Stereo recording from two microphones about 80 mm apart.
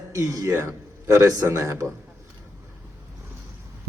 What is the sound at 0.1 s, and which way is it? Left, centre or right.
A man's voice, right.